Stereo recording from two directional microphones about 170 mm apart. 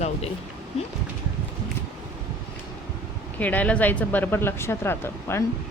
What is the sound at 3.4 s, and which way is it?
Speech, 10° left (ahead or behind).